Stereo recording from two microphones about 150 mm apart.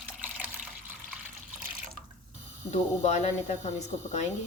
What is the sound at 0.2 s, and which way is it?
Water, 10° right (ahead or behind).